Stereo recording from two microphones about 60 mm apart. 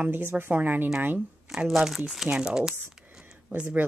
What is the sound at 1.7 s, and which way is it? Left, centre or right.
Speech, centre.